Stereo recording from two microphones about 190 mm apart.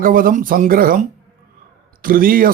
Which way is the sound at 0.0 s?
45° right (ahead or behind).